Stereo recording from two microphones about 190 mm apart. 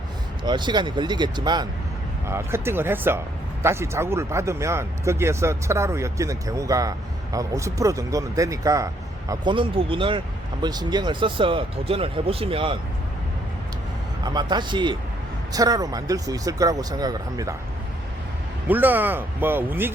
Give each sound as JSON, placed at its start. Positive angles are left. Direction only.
{"t": 0.4, "sound": "speech", "side_deg": -25}
{"t": 14.3, "sound": "speech", "side_deg": -25}
{"t": 18.7, "sound": "speech", "side_deg": -10}